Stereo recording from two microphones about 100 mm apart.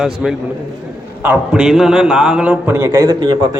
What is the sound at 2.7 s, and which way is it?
Speech, 30° right (ahead or behind).